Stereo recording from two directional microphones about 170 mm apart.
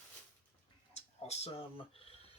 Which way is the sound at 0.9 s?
35° left (ahead or behind).